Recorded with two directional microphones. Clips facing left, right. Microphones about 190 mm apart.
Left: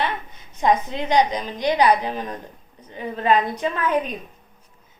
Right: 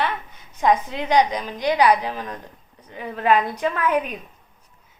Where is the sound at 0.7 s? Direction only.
10° right (ahead or behind).